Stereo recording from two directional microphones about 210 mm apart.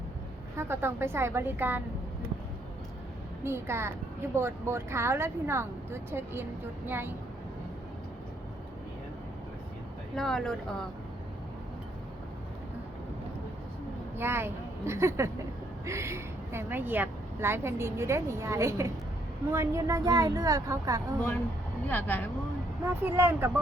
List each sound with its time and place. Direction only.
0.5 s speech: 10° right (ahead or behind)
3.4 s speech: 10° right (ahead or behind)
10.2 s speech: centre (ahead or behind)
14.2 s speech: 10° right (ahead or behind)
21.8 s speech: 10° left (ahead or behind)
23.0 s speech: 10° right (ahead or behind)